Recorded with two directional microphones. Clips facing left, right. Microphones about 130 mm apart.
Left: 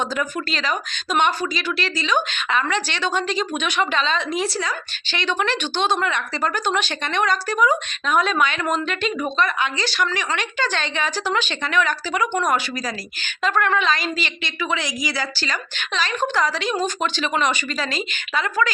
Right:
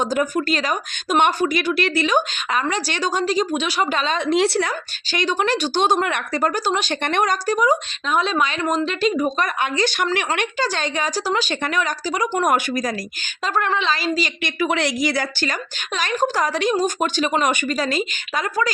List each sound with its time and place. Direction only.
0.0 s speech: 45° right (ahead or behind)
4.3 s speech: 70° right (ahead or behind)
5.1 s speech: 40° right (ahead or behind)
9.6 s speech: 50° right (ahead or behind)
10.6 s speech: 40° right (ahead or behind)
12.4 s speech: 50° right (ahead or behind)
13.4 s speech: 35° right (ahead or behind)
14.4 s speech: 50° right (ahead or behind)